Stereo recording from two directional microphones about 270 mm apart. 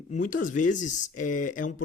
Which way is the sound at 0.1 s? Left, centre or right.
Left.